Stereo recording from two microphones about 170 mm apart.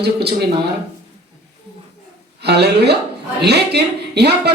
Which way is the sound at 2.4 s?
75° right (ahead or behind).